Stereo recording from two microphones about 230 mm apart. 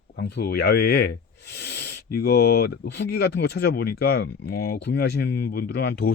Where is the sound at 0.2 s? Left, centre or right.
Left.